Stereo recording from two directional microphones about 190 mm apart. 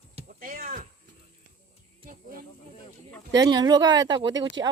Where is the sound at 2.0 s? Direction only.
50° right (ahead or behind).